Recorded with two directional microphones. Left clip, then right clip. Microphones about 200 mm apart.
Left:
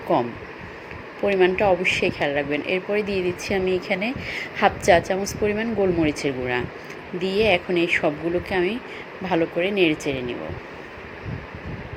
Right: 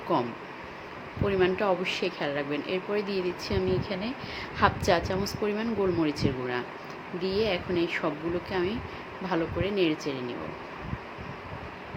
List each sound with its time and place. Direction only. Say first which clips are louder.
1.4 s speech: left 7 dB; 5° left (ahead or behind)